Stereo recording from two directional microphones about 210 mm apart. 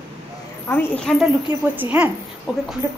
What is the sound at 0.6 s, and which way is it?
Speech, 5° left (ahead or behind).